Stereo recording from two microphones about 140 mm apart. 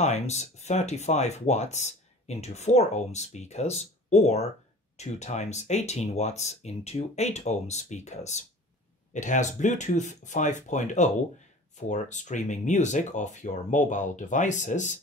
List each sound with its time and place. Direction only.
0.0 s speech: 55° left (ahead or behind)